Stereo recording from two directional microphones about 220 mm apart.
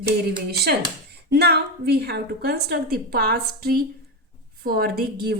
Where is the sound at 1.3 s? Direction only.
50° right (ahead or behind).